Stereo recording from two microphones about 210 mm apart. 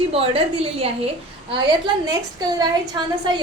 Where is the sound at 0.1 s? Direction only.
25° right (ahead or behind).